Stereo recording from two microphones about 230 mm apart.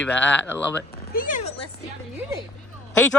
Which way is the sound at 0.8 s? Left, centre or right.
Left.